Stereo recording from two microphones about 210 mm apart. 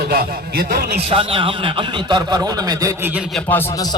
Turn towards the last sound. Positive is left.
turn(degrees=15)  # may be behind; listen again after turning